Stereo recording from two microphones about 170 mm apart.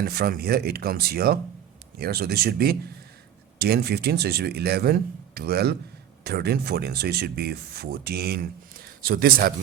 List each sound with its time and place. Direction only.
0.0 s speech: 65° right (ahead or behind)